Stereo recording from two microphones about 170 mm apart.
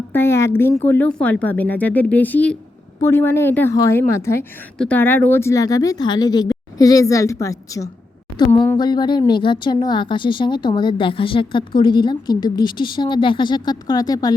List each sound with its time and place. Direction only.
0.1 s speech: 15° left (ahead or behind)